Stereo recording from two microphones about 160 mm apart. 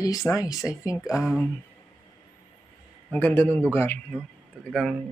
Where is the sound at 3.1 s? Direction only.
10° left (ahead or behind).